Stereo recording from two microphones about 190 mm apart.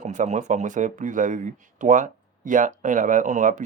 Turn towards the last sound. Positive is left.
turn(degrees=-40)  # may be behind; listen again after turning